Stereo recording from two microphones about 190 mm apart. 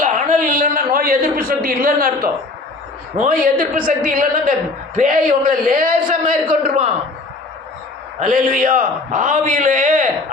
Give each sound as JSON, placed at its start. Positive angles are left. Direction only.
{"t": 0.0, "sound": "a sound", "side_deg": -45}
{"t": 3.2, "sound": "a man's voice", "side_deg": -50}
{"t": 6.4, "sound": "a man's voice", "side_deg": -30}
{"t": 8.2, "sound": "a man's voice", "side_deg": -45}